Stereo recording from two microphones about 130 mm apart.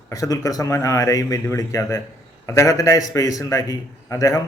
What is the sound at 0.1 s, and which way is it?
A man's voice, 25° left (ahead or behind).